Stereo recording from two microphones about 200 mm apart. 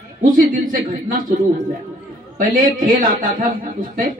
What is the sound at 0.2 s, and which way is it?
A woman's voice, 40° right (ahead or behind).